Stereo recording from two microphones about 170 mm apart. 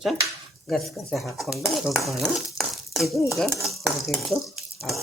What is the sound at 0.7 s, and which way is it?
Speech, centre (ahead or behind).